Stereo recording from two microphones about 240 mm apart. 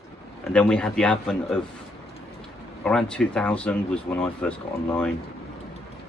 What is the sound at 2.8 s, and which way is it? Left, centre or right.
Speech, centre.